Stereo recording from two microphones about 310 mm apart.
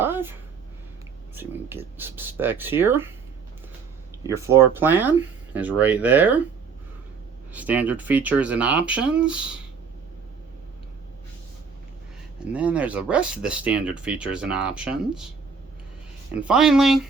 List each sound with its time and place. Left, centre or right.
0.0 s a sound: centre
1.4 s speech: centre
4.2 s speech: centre
7.5 s speech: centre
12.5 s speech: centre
16.3 s speech: centre